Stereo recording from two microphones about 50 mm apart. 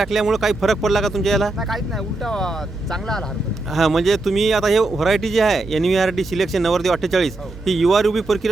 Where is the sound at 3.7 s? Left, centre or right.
Centre.